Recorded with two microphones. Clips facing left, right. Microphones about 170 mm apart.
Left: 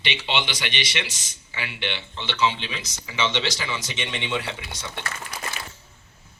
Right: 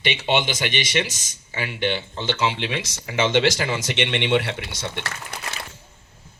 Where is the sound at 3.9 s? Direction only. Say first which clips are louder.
Right 10 dB; 70° right (ahead or behind).